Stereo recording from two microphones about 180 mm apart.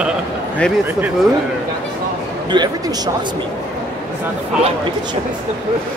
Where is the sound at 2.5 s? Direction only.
20° right (ahead or behind).